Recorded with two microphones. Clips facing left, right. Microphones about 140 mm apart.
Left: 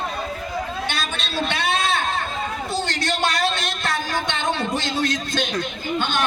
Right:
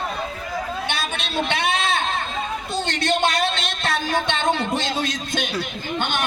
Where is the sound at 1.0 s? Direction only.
20° right (ahead or behind).